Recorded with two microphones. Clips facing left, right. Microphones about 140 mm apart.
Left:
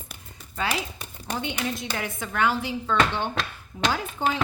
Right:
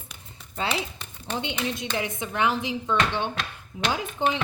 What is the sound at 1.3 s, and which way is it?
Speech, 20° right (ahead or behind).